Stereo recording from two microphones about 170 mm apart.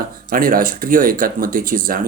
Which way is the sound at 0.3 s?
60° right (ahead or behind).